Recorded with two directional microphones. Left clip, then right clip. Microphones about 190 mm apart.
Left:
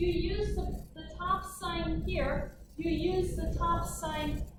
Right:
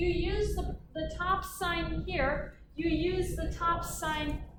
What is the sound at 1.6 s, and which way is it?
Speech, 35° right (ahead or behind).